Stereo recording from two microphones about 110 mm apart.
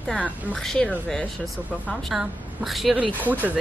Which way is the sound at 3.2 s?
15° right (ahead or behind).